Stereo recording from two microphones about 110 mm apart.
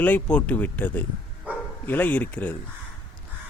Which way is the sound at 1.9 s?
15° left (ahead or behind).